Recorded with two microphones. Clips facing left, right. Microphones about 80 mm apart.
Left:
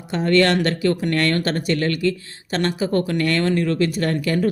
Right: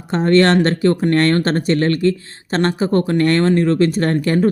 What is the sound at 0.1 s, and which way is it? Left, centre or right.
Speech, right.